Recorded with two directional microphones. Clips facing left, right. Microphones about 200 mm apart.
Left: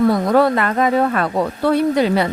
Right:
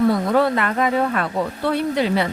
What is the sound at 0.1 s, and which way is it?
Speech, 40° left (ahead or behind).